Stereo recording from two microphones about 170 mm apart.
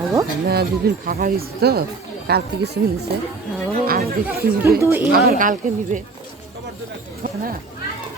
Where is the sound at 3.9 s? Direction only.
65° right (ahead or behind).